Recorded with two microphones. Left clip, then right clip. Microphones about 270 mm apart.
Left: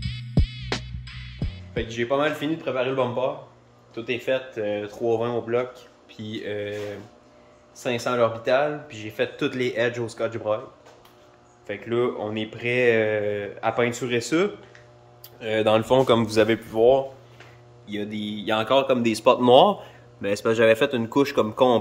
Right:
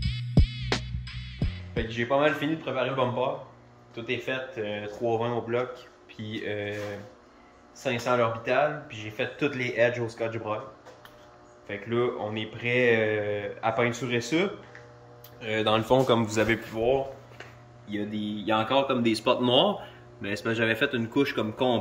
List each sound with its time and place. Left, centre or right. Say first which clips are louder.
0.0 s music: even; centre
1.7 s speech: left 2 dB; centre
7.8 s speech: left 3 dB; centre
11.6 s speech: left 3 dB; centre
15.3 s a sound: left 5 dB; centre
15.9 s speech: left 4 dB; centre